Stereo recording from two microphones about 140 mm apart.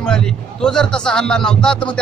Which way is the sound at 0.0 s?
5° left (ahead or behind).